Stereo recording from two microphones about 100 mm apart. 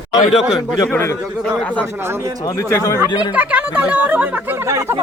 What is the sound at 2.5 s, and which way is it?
Speech, 30° left (ahead or behind).